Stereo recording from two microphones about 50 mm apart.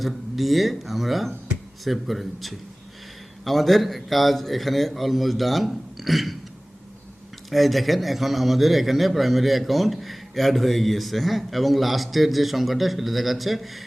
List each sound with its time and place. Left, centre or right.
0.0 s a man's voice: centre
7.5 s a man's voice: centre